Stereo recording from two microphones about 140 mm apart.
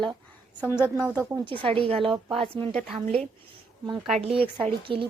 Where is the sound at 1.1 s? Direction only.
10° right (ahead or behind).